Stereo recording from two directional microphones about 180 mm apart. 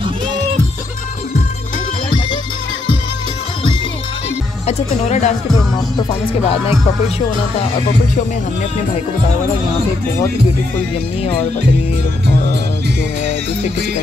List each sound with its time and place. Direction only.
4.6 s speech: 40° left (ahead or behind)